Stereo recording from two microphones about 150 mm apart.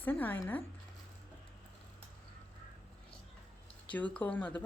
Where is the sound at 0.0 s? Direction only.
15° left (ahead or behind).